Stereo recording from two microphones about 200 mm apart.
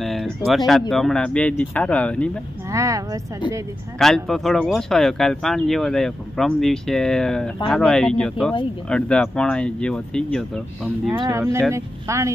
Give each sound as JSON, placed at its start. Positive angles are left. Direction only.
{"t": 0.0, "sound": "speech", "side_deg": 0}
{"t": 2.7, "sound": "speech", "side_deg": -15}
{"t": 4.0, "sound": "speech", "side_deg": 0}
{"t": 11.1, "sound": "speech", "side_deg": -15}